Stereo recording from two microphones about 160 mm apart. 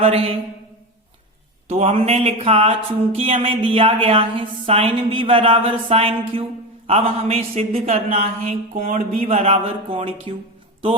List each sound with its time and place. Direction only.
0.0 s speech: 35° right (ahead or behind)
1.6 s speech: 40° right (ahead or behind)